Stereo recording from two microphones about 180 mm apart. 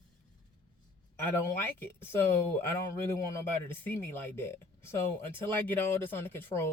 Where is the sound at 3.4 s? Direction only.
10° left (ahead or behind).